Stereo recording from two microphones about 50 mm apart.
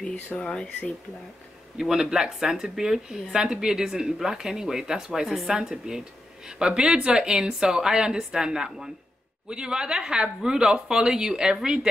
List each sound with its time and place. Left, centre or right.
0.4 s speech: centre
1.8 s speech: centre